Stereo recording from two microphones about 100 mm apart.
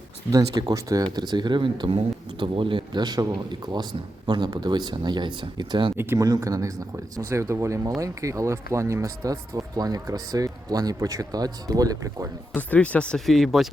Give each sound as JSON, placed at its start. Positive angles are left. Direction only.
{"t": 0.3, "sound": "speech", "side_deg": -35}
{"t": 1.1, "sound": "speech", "side_deg": -45}
{"t": 6.1, "sound": "speech", "side_deg": -40}
{"t": 12.5, "sound": "speech", "side_deg": 15}